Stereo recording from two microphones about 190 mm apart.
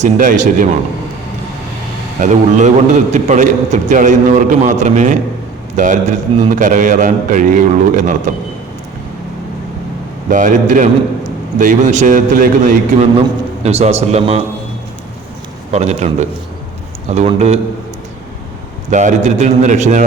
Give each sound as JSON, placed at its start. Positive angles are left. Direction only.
{"t": 0.0, "sound": "a man's voice", "side_deg": -40}
{"t": 2.2, "sound": "a man's voice", "side_deg": -40}
{"t": 10.2, "sound": "a man's voice", "side_deg": -45}
{"t": 13.6, "sound": "a man's voice", "side_deg": -35}
{"t": 15.7, "sound": "a man's voice", "side_deg": -35}
{"t": 18.9, "sound": "a man's voice", "side_deg": -40}